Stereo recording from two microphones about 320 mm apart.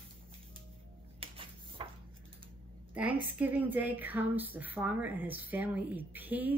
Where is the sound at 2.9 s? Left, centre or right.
Centre.